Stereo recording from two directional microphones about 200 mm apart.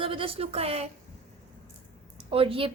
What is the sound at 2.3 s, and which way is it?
Speech, 30° right (ahead or behind).